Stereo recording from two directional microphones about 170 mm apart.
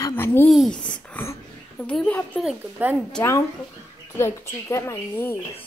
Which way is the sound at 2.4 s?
10° right (ahead or behind).